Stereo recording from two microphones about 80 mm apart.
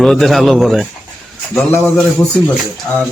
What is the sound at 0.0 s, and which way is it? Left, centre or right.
Speech, centre.